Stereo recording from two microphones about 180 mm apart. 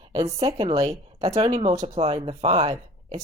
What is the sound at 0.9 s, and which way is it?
Speech, 35° right (ahead or behind).